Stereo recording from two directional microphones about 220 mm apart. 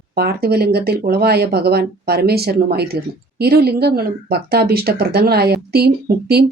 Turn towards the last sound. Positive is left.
turn(degrees=-45)  # may be behind; listen again after turning